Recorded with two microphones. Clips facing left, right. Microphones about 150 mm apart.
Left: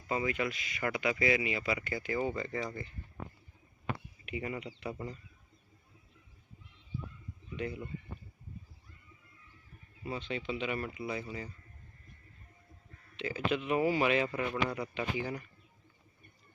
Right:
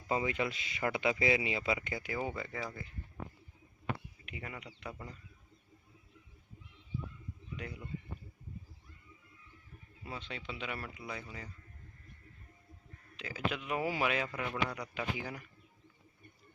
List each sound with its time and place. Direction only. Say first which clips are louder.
0.1 s speech: even; 25° right (ahead or behind); by 2.9 s 5° right (ahead or behind)
4.3 s speech: left 8 dB; 5° left (ahead or behind)
7.5 s speech: left 7 dB; centre (ahead or behind)
10.0 s speech: left 7 dB; centre (ahead or behind)
13.1 s speech: left 5 dB; centre (ahead or behind)